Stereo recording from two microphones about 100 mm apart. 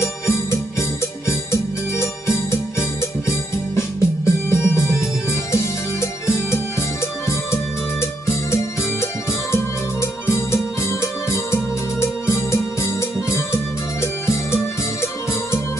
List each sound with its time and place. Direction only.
0.0 s music: 25° left (ahead or behind)
8.0 s music: 25° left (ahead or behind)